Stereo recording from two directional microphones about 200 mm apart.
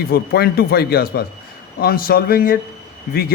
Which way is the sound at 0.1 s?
50° left (ahead or behind).